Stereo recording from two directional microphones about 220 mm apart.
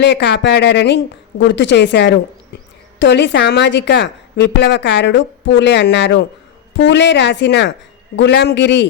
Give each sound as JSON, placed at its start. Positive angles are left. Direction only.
{"t": 0.0, "sound": "a woman's voice", "side_deg": 50}